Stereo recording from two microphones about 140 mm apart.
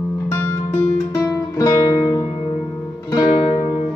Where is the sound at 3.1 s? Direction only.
30° left (ahead or behind).